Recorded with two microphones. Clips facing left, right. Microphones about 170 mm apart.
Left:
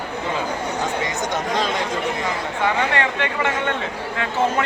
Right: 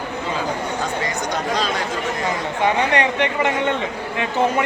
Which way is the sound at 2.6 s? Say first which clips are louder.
Right 3 dB; 20° right (ahead or behind).